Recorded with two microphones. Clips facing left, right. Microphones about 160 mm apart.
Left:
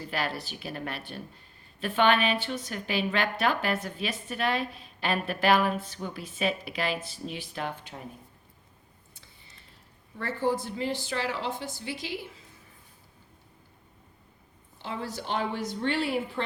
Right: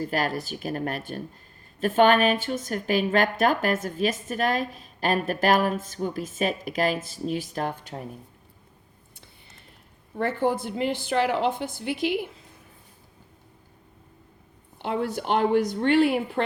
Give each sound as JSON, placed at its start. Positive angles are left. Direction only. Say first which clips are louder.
{"t": 0.0, "sound": "a woman's voice", "louder": "right 6 dB", "side_deg": -45}
{"t": 10.2, "sound": "a woman's voice", "louder": "right 4 dB", "side_deg": -55}
{"t": 14.8, "sound": "a woman's voice", "louder": "right 8 dB", "side_deg": -60}